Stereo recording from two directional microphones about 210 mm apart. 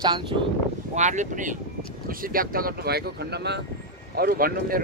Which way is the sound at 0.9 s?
35° right (ahead or behind).